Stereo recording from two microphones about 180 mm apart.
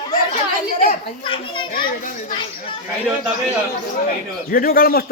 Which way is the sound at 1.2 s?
30° left (ahead or behind).